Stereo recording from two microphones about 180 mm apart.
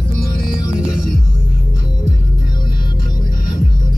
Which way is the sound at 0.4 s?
55° left (ahead or behind).